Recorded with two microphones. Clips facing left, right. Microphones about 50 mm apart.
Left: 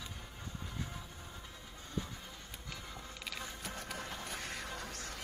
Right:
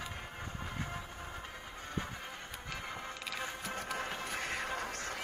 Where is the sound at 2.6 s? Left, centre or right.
Right.